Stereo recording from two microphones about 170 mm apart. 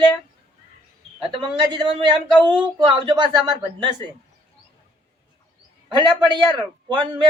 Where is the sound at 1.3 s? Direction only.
30° right (ahead or behind).